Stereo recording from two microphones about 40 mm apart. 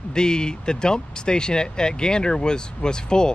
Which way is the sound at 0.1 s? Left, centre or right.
Centre.